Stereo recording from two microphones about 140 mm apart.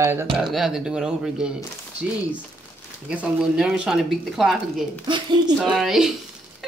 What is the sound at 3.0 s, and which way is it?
Speech, 5° right (ahead or behind).